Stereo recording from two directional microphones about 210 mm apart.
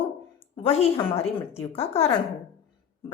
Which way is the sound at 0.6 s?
30° left (ahead or behind).